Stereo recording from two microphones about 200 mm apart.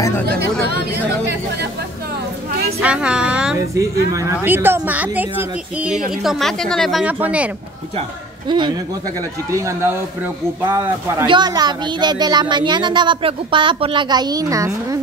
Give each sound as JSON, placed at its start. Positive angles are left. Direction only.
{"t": 2.8, "sound": "a woman's voice", "side_deg": -5}
{"t": 3.5, "sound": "a woman's voice", "side_deg": -15}
{"t": 8.5, "sound": "speech", "side_deg": -25}